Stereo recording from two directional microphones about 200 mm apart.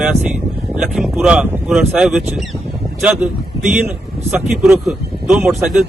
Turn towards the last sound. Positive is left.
turn(degrees=0)  # may be behind; listen again after turning